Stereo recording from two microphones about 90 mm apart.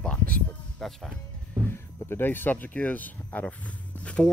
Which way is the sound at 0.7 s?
5° left (ahead or behind).